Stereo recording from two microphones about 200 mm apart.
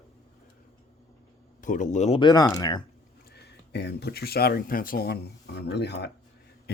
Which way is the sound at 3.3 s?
55° left (ahead or behind).